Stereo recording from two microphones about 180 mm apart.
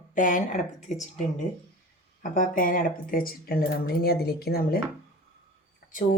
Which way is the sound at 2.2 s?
45° left (ahead or behind).